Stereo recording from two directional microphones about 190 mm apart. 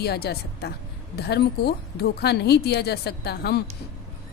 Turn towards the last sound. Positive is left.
turn(degrees=60)  # may be behind; listen again after turning